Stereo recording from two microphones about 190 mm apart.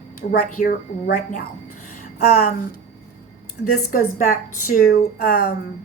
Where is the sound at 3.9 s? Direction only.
45° left (ahead or behind).